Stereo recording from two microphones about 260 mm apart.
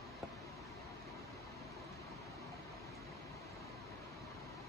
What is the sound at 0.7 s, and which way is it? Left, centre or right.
Vehicle, centre.